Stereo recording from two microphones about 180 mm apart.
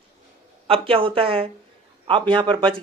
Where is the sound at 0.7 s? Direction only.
30° right (ahead or behind).